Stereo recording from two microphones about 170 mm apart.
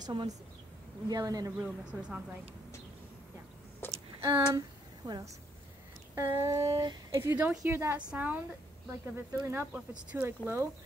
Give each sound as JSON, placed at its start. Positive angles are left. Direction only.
{"t": 0.0, "sound": "speech", "side_deg": -30}
{"t": 1.9, "sound": "speech", "side_deg": -5}
{"t": 3.8, "sound": "a sound", "side_deg": 15}
{"t": 4.2, "sound": "a sound", "side_deg": -20}
{"t": 6.1, "sound": "speech", "side_deg": -15}
{"t": 7.2, "sound": "speech", "side_deg": -15}